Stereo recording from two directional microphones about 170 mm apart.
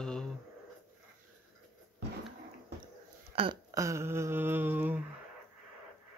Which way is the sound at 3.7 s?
20° right (ahead or behind).